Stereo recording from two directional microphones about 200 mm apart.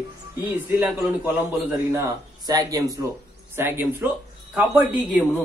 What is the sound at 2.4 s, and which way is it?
A man's voice, 20° right (ahead or behind).